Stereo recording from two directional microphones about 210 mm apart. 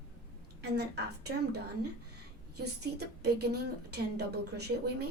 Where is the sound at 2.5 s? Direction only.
50° right (ahead or behind).